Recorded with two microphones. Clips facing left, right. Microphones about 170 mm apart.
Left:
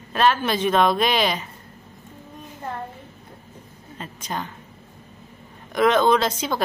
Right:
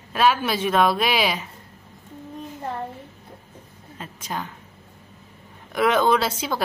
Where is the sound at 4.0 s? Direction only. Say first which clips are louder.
Left 1 dB; 5° right (ahead or behind).